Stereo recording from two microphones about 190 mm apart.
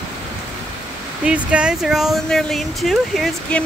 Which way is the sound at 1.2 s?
5° right (ahead or behind).